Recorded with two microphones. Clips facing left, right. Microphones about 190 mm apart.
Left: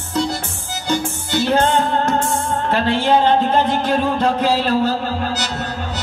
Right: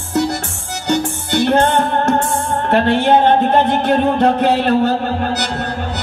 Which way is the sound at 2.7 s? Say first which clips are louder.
Right 4 dB; 60° right (ahead or behind).